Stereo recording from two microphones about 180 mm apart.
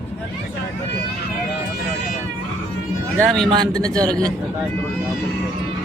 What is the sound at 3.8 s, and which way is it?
Speech, 20° right (ahead or behind).